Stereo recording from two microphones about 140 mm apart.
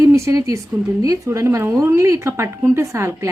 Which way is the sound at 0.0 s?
20° right (ahead or behind).